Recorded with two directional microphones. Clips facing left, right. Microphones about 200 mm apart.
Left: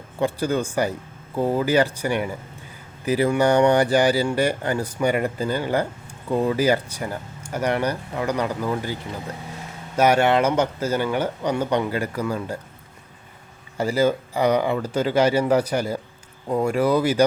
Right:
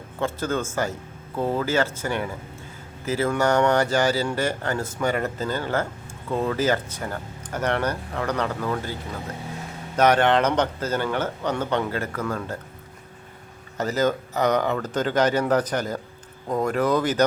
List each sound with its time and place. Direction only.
0.2 s speech: 15° left (ahead or behind)
13.7 s speech: 10° left (ahead or behind)